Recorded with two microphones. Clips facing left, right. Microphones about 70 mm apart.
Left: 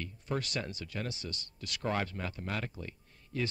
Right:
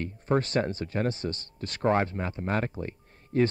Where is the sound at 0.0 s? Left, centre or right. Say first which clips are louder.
Right 10 dB; right.